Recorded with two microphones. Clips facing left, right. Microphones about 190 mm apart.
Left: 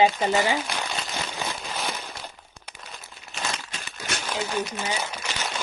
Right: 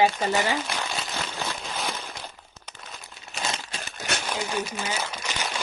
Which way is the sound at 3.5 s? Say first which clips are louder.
Right 1 dB; 35° right (ahead or behind).